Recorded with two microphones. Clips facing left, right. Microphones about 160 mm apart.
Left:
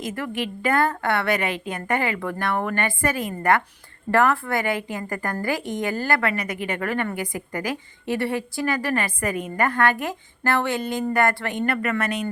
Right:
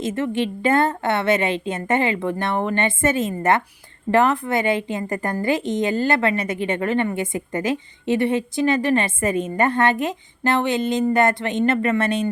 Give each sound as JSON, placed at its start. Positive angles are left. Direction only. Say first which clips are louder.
{"t": 0.0, "sound": "a woman's voice", "louder": "right 6 dB", "side_deg": -25}